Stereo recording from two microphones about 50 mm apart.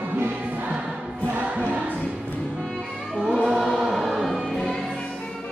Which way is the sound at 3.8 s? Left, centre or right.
Centre.